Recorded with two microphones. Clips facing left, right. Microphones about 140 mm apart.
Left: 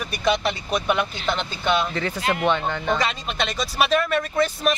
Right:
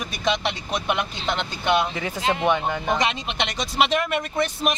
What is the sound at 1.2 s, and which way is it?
Speech, 15° right (ahead or behind).